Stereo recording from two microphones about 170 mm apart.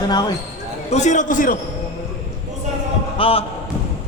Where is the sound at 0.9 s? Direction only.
45° left (ahead or behind).